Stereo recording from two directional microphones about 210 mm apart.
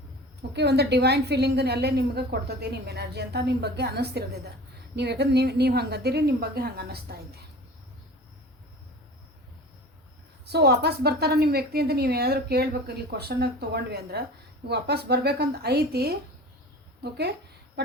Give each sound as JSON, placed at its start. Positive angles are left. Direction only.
{"t": 0.5, "sound": "a woman's voice", "side_deg": -50}
{"t": 10.4, "sound": "a woman's voice", "side_deg": -50}